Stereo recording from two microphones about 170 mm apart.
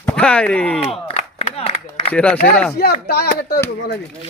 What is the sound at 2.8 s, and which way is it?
Speech, 65° left (ahead or behind).